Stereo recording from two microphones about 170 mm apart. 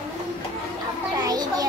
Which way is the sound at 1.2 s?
20° right (ahead or behind).